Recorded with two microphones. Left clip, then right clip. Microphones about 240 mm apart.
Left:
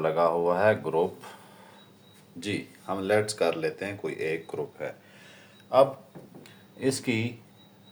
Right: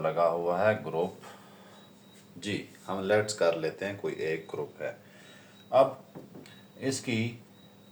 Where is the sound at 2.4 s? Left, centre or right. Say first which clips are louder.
Left 3 dB; left.